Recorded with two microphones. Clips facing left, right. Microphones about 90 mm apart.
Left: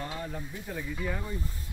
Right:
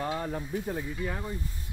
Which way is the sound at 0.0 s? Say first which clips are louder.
Right 5 dB; 40° right (ahead or behind).